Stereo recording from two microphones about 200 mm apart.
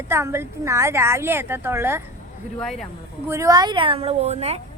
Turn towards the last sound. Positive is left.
turn(degrees=-30)  # may be behind; listen again after turning